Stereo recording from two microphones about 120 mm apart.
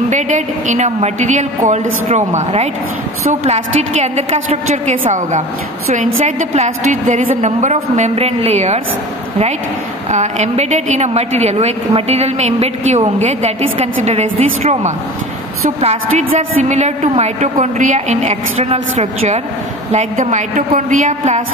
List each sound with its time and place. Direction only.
0.1 s a woman's voice: 80° right
5.9 s a woman's voice: 70° right (ahead or behind)
10.1 s a woman's voice: 75° right (ahead or behind)